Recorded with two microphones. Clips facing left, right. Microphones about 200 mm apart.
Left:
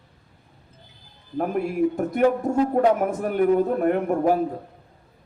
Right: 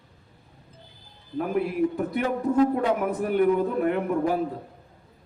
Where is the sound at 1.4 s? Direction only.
45° left (ahead or behind).